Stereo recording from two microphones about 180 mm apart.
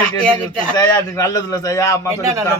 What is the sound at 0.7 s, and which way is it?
A man's voice, 20° left (ahead or behind).